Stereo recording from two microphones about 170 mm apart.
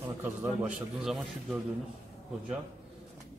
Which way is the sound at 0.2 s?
10° right (ahead or behind).